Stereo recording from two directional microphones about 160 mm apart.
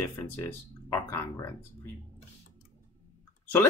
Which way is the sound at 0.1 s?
15° left (ahead or behind).